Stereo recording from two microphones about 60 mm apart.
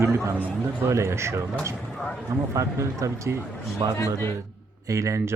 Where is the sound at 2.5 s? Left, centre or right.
Right.